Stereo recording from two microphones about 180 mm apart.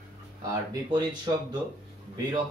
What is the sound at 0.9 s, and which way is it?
Speech, 25° right (ahead or behind).